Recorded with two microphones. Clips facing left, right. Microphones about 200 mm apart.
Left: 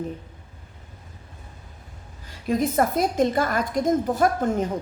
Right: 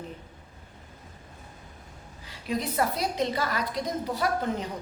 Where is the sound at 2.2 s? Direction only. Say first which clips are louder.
Left 7 dB; 45° left (ahead or behind).